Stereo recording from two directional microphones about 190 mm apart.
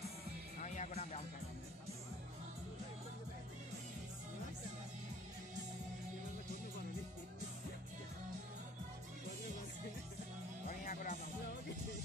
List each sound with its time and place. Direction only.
0.6 s music: 40° left (ahead or behind)
10.7 s music: 45° left (ahead or behind)